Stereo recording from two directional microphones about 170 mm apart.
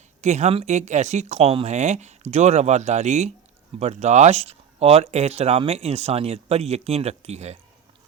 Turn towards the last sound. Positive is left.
turn(degrees=-40)  # may be behind; listen again after turning